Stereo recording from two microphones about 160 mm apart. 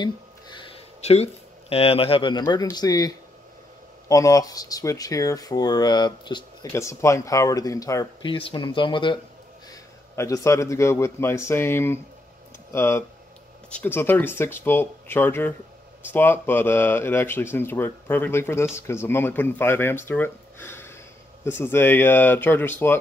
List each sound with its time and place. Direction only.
0.0 s a sound: 30° left (ahead or behind)
2.5 s speech: 25° left (ahead or behind)
9.7 s speech: 20° left (ahead or behind)